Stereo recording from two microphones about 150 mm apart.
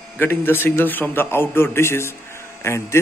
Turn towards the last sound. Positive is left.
turn(degrees=20)  # may be behind; listen again after turning